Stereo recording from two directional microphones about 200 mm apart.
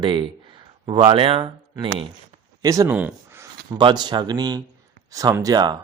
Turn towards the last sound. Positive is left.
turn(degrees=-20)  # may be behind; listen again after turning